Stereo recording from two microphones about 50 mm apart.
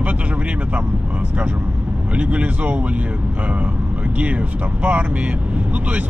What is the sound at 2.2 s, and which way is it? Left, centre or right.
Speech, right.